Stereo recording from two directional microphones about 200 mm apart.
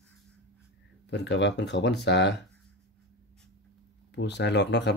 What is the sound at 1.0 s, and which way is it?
Speech, 60° left (ahead or behind).